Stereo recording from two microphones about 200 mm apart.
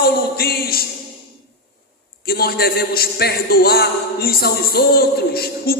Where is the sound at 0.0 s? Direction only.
50° left (ahead or behind).